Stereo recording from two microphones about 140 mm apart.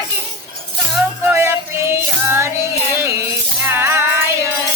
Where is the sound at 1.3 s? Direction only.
15° right (ahead or behind).